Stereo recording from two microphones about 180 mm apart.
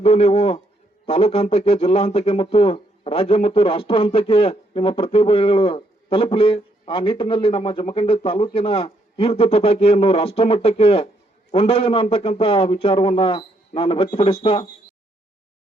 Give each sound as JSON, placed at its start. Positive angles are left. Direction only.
{"t": 0.0, "sound": "a man's voice", "side_deg": 35}